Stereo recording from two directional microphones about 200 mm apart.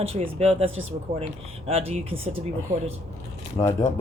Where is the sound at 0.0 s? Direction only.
30° right (ahead or behind).